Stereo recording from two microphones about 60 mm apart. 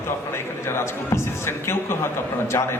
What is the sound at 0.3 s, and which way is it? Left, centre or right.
A man's voice, left.